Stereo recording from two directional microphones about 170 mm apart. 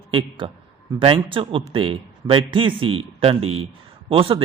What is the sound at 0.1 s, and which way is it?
A man's voice, 30° right (ahead or behind).